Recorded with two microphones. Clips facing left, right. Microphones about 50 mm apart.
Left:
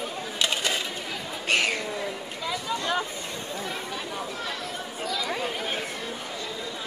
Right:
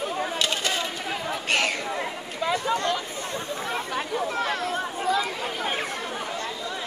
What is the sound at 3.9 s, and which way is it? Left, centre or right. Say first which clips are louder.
Chatter: right 6 dB; right.